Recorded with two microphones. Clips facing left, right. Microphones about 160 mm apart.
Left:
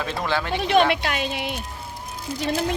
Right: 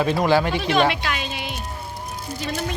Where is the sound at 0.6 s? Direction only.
55° left (ahead or behind).